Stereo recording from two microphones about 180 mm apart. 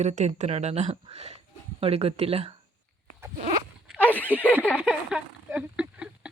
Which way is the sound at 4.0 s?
10° left (ahead or behind).